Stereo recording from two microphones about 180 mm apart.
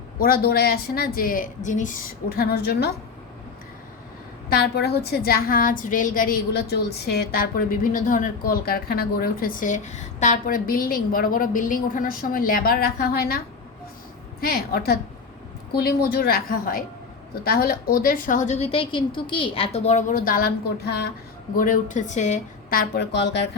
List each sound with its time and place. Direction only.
0.2 s a woman's voice: 55° left (ahead or behind)
4.4 s a woman's voice: 60° left (ahead or behind)
14.4 s a woman's voice: 60° left (ahead or behind)
21.5 s a woman's voice: 50° left (ahead or behind); by 23.5 s 70° left (ahead or behind)